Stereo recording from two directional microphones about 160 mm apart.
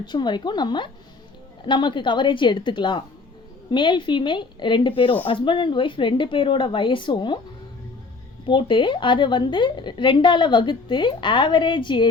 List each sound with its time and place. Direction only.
0.0 s a woman's voice: 30° left (ahead or behind)
8.4 s a woman's voice: 30° left (ahead or behind)